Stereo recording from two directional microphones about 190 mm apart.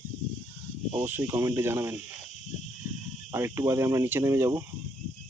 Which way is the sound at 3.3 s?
15° right (ahead or behind).